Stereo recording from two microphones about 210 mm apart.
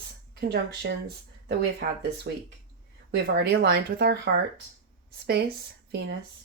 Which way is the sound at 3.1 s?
55° right (ahead or behind).